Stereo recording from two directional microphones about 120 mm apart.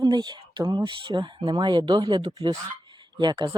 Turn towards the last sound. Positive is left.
turn(degrees=-40)  # may be behind; listen again after turning